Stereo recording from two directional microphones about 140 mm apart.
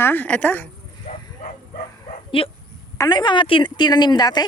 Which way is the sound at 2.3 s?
40° left (ahead or behind).